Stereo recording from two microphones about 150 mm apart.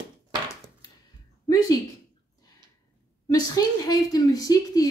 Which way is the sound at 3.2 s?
25° left (ahead or behind).